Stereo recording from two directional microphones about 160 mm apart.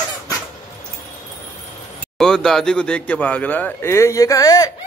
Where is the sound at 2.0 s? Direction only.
5° left (ahead or behind); by 4.7 s 20° left (ahead or behind).